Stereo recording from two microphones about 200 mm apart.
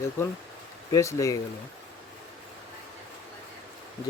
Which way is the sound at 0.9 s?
15° left (ahead or behind).